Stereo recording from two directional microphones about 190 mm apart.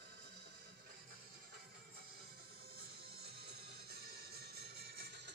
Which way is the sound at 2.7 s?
55° right (ahead or behind).